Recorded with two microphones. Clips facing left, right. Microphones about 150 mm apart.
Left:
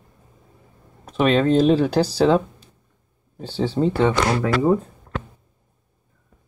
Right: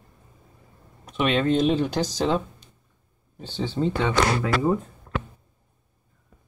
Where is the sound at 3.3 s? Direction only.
35° left (ahead or behind).